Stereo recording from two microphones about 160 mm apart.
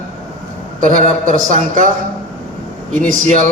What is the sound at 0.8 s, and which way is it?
A man's voice, 55° right (ahead or behind).